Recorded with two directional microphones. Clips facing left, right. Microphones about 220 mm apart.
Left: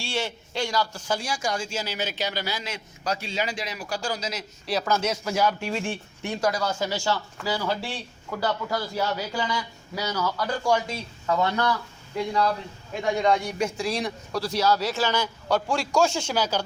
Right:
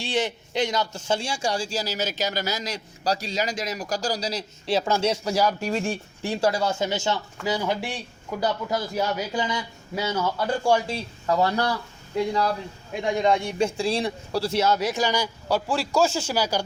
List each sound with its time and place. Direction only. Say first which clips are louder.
0.0 s speech: right 4 dB; 20° right (ahead or behind); by 11.7 s 35° right (ahead or behind)
13.2 s speech: right 3 dB; 25° right (ahead or behind)